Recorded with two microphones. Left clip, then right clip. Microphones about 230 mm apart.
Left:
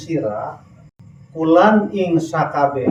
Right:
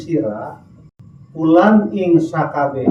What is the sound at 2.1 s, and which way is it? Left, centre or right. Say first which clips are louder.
Speech: left 1 dB; left.